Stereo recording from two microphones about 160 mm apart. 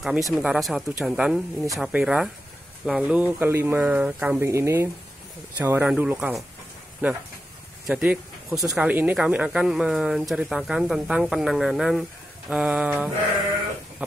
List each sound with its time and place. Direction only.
0.0 s speech: 5° right (ahead or behind)